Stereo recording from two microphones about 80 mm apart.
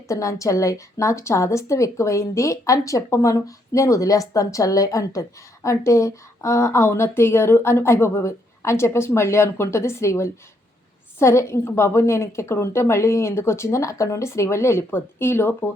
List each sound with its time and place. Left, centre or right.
0.1 s a woman's voice: left